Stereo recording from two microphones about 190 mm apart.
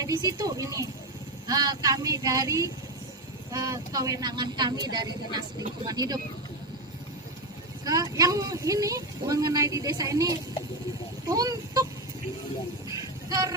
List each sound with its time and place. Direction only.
0.0 s a woman's voice: 20° right (ahead or behind)
7.9 s speech: 20° right (ahead or behind)
11.3 s vehicle: 20° right (ahead or behind)
13.3 s a woman's voice: 20° right (ahead or behind)